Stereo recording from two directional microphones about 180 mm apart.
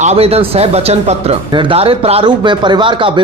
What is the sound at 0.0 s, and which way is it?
Speech, 35° right (ahead or behind).